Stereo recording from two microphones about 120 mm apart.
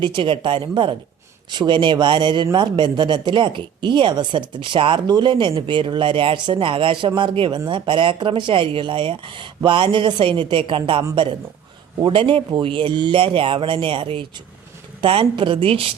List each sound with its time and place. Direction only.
0.0 s a man's voice: 45° right (ahead or behind)